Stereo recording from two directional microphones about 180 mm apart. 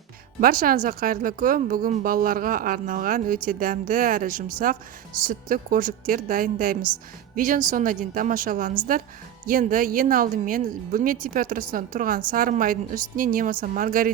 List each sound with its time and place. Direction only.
0.3 s speech: 50° right (ahead or behind)